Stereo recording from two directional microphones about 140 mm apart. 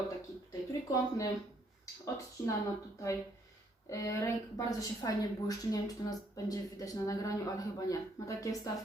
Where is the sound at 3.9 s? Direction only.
25° left (ahead or behind).